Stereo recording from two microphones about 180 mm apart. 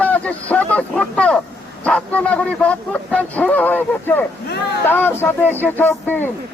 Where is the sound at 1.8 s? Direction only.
5° left (ahead or behind).